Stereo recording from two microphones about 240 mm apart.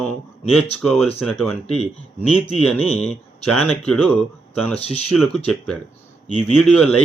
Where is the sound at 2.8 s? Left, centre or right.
Left.